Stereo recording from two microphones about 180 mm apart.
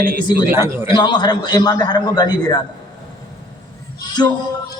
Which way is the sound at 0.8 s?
25° left (ahead or behind).